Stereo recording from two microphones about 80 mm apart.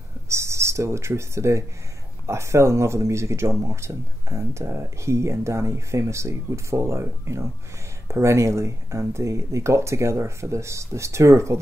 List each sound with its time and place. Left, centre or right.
0.3 s speech: right